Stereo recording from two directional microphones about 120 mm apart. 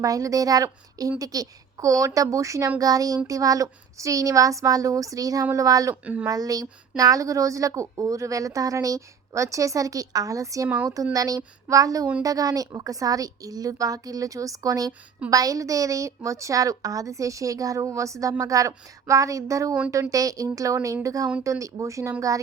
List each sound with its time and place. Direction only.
0.0 s speech: 30° right (ahead or behind)